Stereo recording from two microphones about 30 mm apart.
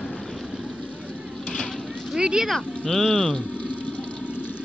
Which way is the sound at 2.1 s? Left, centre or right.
Right.